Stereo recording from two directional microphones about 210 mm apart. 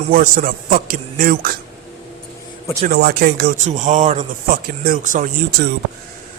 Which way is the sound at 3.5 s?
35° right (ahead or behind).